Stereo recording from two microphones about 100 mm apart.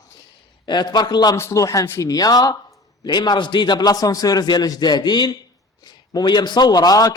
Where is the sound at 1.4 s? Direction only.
30° left (ahead or behind).